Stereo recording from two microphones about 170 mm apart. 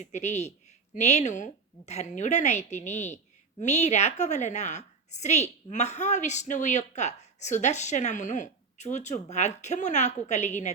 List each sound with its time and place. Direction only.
0.0 s a woman's voice: 45° left (ahead or behind)